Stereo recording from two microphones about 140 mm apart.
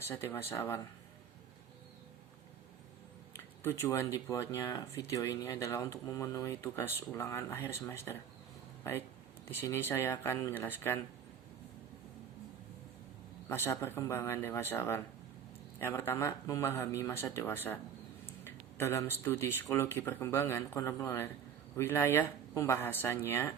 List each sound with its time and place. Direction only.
0.1 s speech: 15° left (ahead or behind)
3.3 s speech: 15° left (ahead or behind)
13.5 s speech: 15° left (ahead or behind)